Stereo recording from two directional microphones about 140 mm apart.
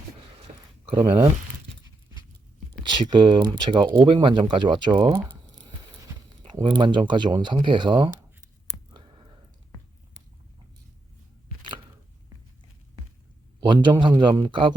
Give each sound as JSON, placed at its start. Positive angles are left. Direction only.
{"t": 0.9, "sound": "speech", "side_deg": -40}
{"t": 2.8, "sound": "speech", "side_deg": -35}
{"t": 6.4, "sound": "speech", "side_deg": -35}
{"t": 8.9, "sound": "clicking", "side_deg": -35}
{"t": 13.7, "sound": "a man's voice", "side_deg": -35}